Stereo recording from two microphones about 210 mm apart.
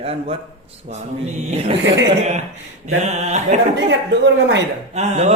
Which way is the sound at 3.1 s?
35° right (ahead or behind).